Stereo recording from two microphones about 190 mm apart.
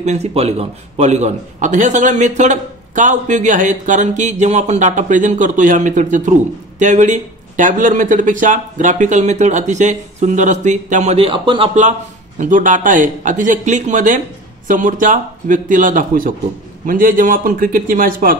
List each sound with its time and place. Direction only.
0.0 s a man's voice: 35° right (ahead or behind)
12.4 s speech: 40° right (ahead or behind)